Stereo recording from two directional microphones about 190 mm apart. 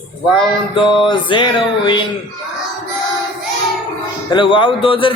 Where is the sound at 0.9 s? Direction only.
25° left (ahead or behind).